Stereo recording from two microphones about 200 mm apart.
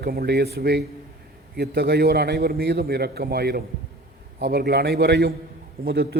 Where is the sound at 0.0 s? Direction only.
50° right (ahead or behind).